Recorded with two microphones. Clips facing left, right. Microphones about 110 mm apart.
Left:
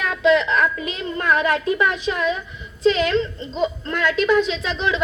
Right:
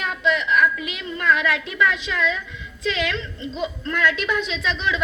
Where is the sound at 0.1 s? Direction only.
55° left (ahead or behind).